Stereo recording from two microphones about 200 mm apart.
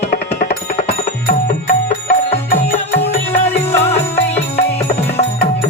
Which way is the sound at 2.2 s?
30° left (ahead or behind).